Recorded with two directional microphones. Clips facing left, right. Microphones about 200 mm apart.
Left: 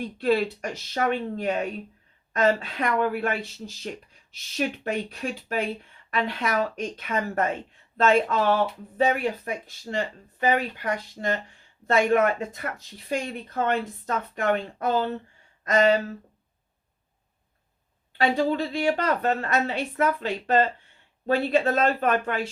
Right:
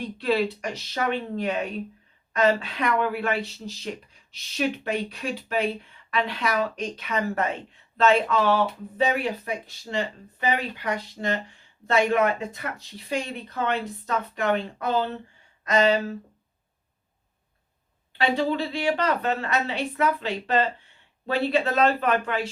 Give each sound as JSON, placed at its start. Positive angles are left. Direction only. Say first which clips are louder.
{"t": 0.0, "sound": "speech", "louder": "left 1 dB", "side_deg": 50}
{"t": 18.2, "sound": "speech", "louder": "left 1 dB", "side_deg": 45}